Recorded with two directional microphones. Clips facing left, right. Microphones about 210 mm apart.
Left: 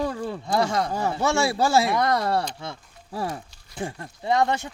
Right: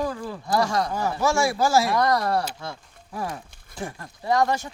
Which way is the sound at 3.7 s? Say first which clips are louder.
Left 2 dB; 25° left (ahead or behind).